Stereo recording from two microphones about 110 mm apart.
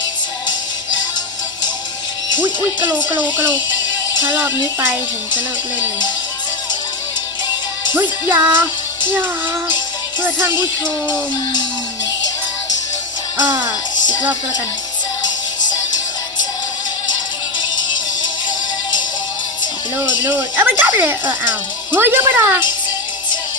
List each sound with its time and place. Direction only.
2.4 s speech: 15° right (ahead or behind)
8.3 s speech: 15° right (ahead or behind)
20.0 s speech: 15° right (ahead or behind)